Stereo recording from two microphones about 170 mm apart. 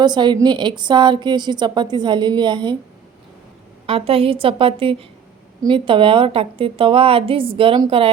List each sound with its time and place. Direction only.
0.0 s a woman's voice: 25° right (ahead or behind)
3.8 s a woman's voice: 35° right (ahead or behind)